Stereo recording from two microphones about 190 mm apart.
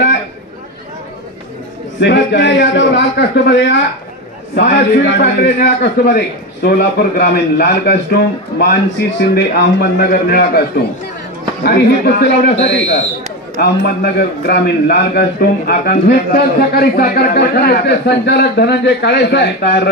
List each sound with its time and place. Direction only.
2.0 s a man's voice: 65° left (ahead or behind)